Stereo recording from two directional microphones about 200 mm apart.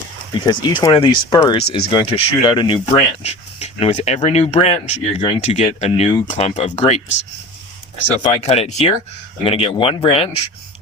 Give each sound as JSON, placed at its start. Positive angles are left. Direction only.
{"t": 0.3, "sound": "speech", "side_deg": 20}
{"t": 8.4, "sound": "speech", "side_deg": 35}